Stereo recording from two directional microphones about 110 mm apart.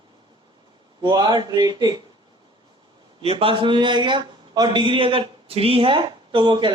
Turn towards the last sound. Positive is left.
turn(degrees=-45)  # may be behind; listen again after turning